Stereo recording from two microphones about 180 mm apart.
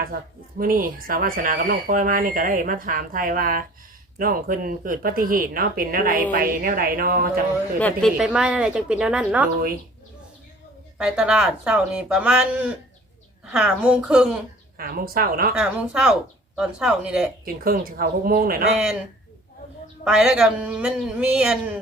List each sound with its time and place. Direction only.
0.6 s speech: 50° right (ahead or behind)
7.8 s a woman's voice: 10° left (ahead or behind)
8.2 s speech: 5° right (ahead or behind)
10.9 s speech: 5° right (ahead or behind)
14.8 s speech: 55° right (ahead or behind)
15.5 s speech: 5° right (ahead or behind)
17.4 s speech: 55° right (ahead or behind)
20.1 s speech: 5° right (ahead or behind)